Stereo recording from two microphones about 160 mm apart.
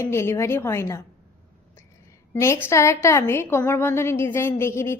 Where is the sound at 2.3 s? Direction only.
15° left (ahead or behind).